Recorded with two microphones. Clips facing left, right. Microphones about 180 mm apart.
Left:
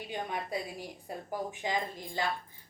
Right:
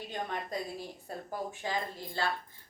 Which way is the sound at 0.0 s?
10° left (ahead or behind).